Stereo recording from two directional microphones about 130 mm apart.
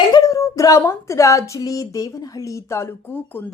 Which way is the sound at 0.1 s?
25° left (ahead or behind).